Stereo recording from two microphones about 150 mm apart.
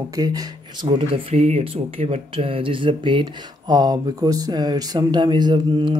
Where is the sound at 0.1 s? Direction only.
25° right (ahead or behind).